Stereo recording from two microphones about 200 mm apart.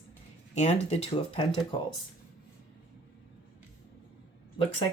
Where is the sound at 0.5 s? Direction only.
30° left (ahead or behind).